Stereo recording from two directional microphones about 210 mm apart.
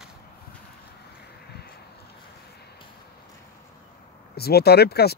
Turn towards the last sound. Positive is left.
turn(degrees=50)  # may be behind; listen again after turning